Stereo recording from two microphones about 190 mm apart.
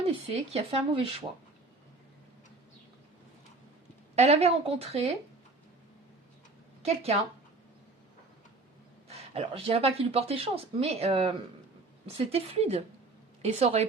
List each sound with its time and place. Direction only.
0.0 s speech: 30° right (ahead or behind)
4.1 s speech: 35° right (ahead or behind)
6.8 s speech: 30° right (ahead or behind)
9.0 s speech: 35° right (ahead or behind)